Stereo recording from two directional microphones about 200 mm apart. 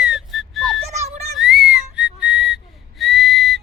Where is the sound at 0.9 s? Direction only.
30° right (ahead or behind).